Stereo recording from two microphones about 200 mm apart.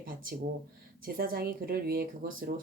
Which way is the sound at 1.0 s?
45° right (ahead or behind).